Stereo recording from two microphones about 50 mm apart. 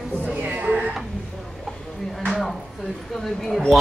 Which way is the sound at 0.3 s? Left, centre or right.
Right.